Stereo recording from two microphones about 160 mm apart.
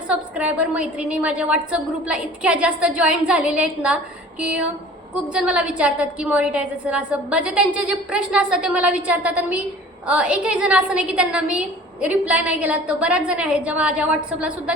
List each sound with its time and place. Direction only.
0.1 s a woman's voice: 10° right (ahead or behind)